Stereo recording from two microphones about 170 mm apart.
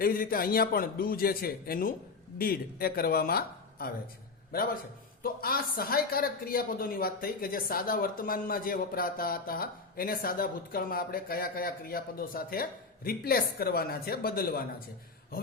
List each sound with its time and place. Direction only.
0.0 s speech: 55° left (ahead or behind)